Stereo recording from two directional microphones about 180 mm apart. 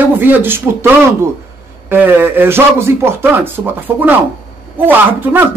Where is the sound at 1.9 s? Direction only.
10° right (ahead or behind).